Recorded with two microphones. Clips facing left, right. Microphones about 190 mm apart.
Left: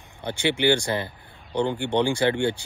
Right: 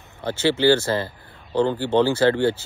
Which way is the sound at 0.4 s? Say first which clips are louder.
Right 4 dB; 15° left (ahead or behind).